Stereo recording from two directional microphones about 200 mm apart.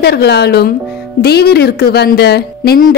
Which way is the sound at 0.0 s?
55° left (ahead or behind).